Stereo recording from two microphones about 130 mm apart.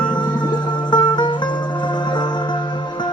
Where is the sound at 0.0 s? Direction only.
35° left (ahead or behind).